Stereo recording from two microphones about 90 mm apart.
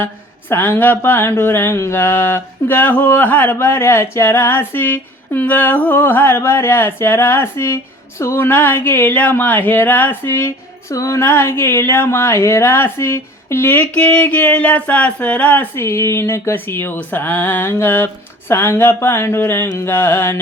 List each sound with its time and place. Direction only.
0.5 s speech: 25° left (ahead or behind)
15.7 s speech: 30° left (ahead or behind)